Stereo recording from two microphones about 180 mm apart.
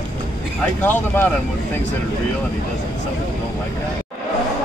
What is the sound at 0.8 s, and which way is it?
Speech, 10° left (ahead or behind).